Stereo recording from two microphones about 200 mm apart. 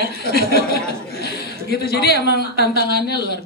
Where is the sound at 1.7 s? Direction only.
55° left (ahead or behind).